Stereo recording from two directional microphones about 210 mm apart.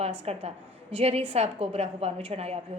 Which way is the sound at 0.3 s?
30° right (ahead or behind).